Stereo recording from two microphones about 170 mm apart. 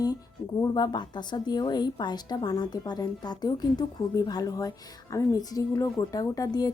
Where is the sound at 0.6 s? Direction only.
25° left (ahead or behind).